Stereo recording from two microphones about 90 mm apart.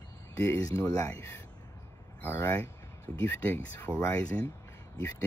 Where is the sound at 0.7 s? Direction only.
30° left (ahead or behind).